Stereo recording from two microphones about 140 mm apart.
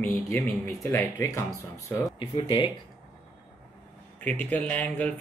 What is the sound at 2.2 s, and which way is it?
Speech, 40° left (ahead or behind).